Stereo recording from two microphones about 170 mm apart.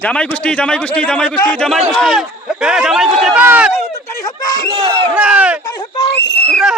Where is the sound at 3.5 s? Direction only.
10° right (ahead or behind).